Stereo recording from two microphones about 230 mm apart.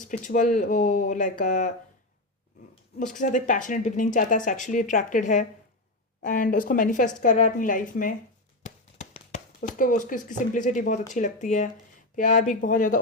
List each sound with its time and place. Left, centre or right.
0.0 s speech: left
3.1 s speech: left
8.6 s a sound: left
9.6 s speech: left